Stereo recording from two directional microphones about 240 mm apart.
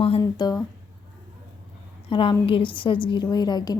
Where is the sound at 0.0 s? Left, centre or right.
Left.